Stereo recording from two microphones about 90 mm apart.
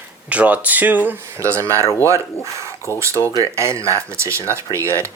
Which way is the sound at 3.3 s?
35° right (ahead or behind).